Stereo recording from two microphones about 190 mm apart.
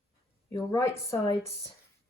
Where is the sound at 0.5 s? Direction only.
15° left (ahead or behind).